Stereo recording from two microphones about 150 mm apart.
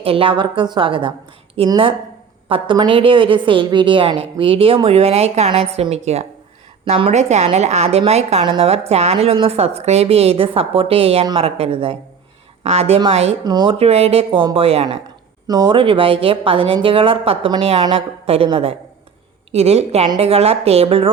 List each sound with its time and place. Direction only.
0.0 s a woman's voice: 40° right (ahead or behind)
13.4 s speech: 30° right (ahead or behind)
13.7 s a woman's voice: 45° right (ahead or behind)
15.4 s a woman's voice: 25° right (ahead or behind)